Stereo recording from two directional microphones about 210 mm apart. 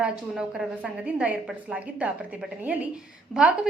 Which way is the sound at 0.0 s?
5° right (ahead or behind).